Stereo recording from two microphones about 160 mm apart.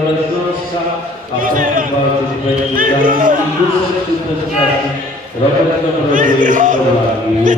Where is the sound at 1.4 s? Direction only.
60° right (ahead or behind).